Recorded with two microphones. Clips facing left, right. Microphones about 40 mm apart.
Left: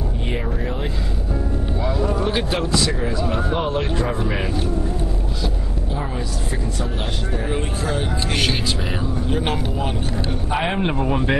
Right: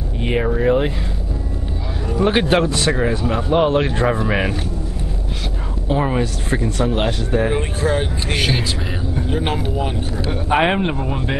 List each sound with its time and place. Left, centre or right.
0.2 s speech: right
2.2 s speech: right
5.9 s speech: right
7.5 s speech: right
9.3 s speech: centre
10.3 s speech: right
10.8 s speech: centre